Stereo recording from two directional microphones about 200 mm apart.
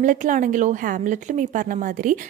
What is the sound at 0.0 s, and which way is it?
A woman's voice, 40° right (ahead or behind).